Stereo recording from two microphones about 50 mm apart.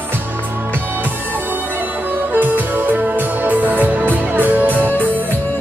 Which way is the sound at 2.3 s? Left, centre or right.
Right.